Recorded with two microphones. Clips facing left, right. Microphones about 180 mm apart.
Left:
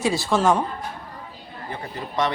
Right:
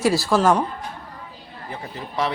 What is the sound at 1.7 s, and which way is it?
Speech, 5° right (ahead or behind).